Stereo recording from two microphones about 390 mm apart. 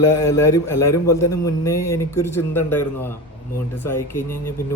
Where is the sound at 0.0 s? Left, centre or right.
Centre.